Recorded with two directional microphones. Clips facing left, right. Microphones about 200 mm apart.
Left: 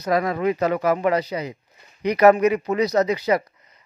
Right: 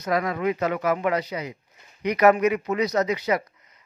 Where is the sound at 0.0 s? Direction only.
35° left (ahead or behind).